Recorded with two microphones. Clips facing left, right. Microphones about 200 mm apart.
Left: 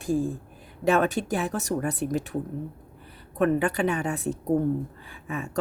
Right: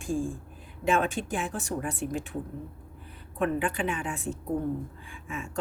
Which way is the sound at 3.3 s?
40° left (ahead or behind).